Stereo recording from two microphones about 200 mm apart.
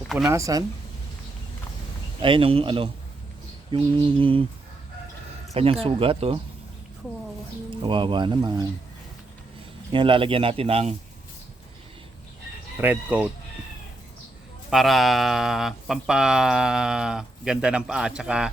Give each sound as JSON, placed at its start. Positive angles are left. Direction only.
{"t": 0.3, "sound": "speech", "side_deg": -15}
{"t": 2.2, "sound": "speech", "side_deg": -25}
{"t": 5.8, "sound": "speech", "side_deg": -25}
{"t": 7.7, "sound": "speech", "side_deg": -25}
{"t": 9.9, "sound": "speech", "side_deg": -25}
{"t": 12.7, "sound": "speech", "side_deg": -10}
{"t": 14.7, "sound": "speech", "side_deg": 0}